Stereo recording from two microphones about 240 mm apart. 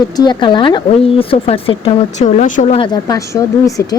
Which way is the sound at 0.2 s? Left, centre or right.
Centre.